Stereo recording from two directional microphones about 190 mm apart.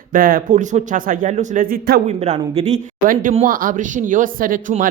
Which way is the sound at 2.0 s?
35° right (ahead or behind).